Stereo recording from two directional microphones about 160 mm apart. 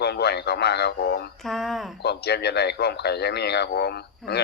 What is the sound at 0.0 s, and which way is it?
Speech, 90° left.